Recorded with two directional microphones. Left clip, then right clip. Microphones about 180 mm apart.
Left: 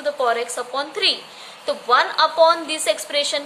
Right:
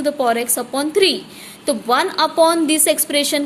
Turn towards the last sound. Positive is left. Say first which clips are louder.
# right 3 dB
turn(degrees=-40)  # may be behind; listen again after turning